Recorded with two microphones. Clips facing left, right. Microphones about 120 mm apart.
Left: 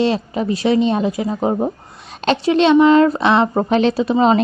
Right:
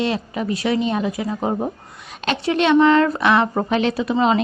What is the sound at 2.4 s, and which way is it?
A woman's voice, 20° left (ahead or behind).